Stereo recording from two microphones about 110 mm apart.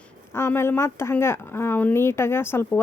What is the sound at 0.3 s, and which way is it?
Speech, 25° left (ahead or behind).